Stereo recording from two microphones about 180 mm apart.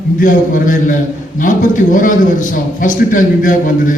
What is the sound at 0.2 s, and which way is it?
A man's voice, 50° left (ahead or behind).